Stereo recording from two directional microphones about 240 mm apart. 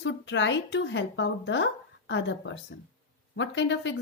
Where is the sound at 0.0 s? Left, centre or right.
Left.